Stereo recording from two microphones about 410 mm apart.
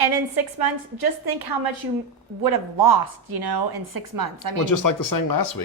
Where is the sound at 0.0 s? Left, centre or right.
Right.